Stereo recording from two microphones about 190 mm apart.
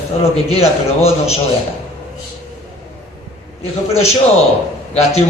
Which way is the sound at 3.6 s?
30° left (ahead or behind).